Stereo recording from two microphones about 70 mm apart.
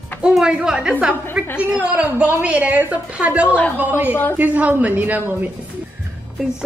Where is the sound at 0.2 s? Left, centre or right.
Centre; by 5.2 s right.